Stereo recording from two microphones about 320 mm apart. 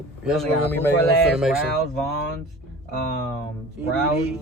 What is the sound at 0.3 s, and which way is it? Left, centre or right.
Speech, centre.